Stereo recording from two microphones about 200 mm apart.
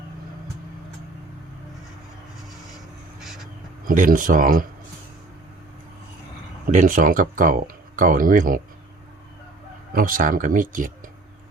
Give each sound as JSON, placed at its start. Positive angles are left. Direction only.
{"t": 3.8, "sound": "speech", "side_deg": -40}
{"t": 6.7, "sound": "speech", "side_deg": -40}
{"t": 9.9, "sound": "speech", "side_deg": -45}